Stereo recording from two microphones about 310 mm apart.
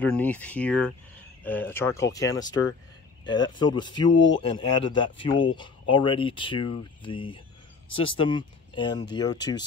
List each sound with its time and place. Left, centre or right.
0.0 s speech: centre
4.1 s speech: left
4.4 s speech: centre